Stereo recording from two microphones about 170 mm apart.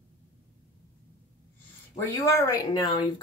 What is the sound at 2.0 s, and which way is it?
Speech, 15° left (ahead or behind).